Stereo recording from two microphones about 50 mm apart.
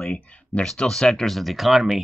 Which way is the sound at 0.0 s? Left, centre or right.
Left.